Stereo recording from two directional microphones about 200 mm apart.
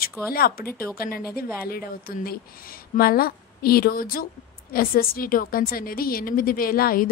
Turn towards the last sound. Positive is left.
turn(degrees=45)  # may be behind; listen again after turning